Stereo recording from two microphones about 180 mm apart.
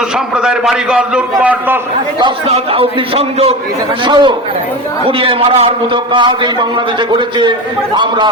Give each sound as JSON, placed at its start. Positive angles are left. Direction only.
{"t": 0.3, "sound": "a man's voice", "side_deg": -5}
{"t": 2.5, "sound": "a man's voice", "side_deg": -35}